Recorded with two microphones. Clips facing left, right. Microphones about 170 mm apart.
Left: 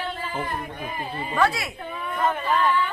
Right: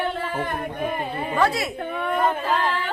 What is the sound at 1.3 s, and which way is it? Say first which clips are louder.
Speech: right 1 dB; 25° right (ahead or behind).